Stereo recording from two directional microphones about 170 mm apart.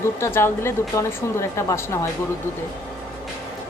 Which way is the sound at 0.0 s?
15° left (ahead or behind).